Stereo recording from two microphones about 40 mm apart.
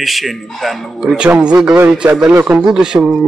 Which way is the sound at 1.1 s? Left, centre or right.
Right.